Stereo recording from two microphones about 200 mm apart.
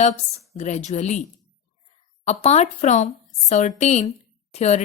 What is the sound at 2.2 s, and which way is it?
A woman's voice, 30° left (ahead or behind).